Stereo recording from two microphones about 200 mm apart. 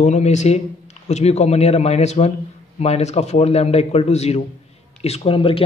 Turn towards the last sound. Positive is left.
turn(degrees=25)  # may be behind; listen again after turning